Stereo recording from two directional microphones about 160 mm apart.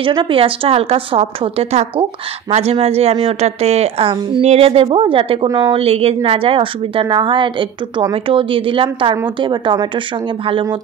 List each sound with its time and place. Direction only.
0.0 s a woman's voice: 30° right (ahead or behind)
5.8 s a woman's voice: 40° right (ahead or behind)